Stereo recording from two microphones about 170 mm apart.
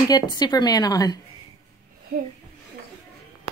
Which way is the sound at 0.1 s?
25° left (ahead or behind).